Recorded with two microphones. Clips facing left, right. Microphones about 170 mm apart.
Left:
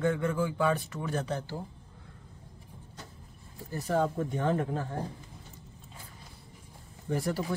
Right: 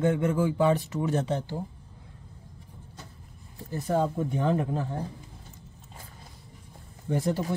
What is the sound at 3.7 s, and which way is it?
Speech, 20° right (ahead or behind).